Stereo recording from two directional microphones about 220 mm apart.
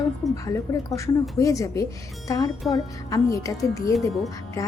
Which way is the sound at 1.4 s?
15° left (ahead or behind).